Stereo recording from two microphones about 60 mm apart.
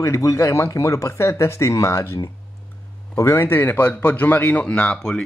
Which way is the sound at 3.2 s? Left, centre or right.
Left.